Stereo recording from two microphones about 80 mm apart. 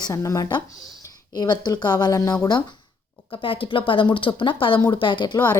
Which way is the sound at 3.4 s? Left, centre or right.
Left.